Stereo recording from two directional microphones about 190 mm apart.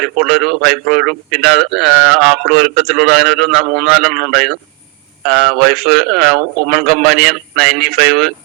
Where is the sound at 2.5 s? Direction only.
55° right (ahead or behind).